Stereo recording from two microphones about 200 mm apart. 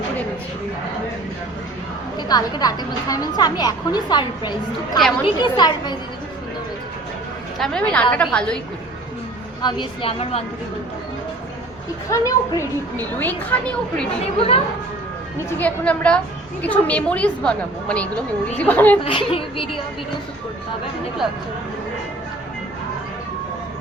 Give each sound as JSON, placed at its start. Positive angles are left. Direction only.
{"t": 2.1, "sound": "a woman's voice", "side_deg": 20}
{"t": 7.6, "sound": "a woman's voice", "side_deg": 5}
{"t": 9.6, "sound": "a woman's voice", "side_deg": 20}
{"t": 12.1, "sound": "a woman's voice", "side_deg": 15}
{"t": 14.3, "sound": "a woman's voice", "side_deg": 30}
{"t": 15.5, "sound": "a woman's voice", "side_deg": 5}
{"t": 19.0, "sound": "a woman's voice", "side_deg": 25}